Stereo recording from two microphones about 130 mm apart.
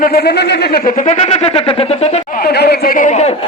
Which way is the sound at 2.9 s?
80° left.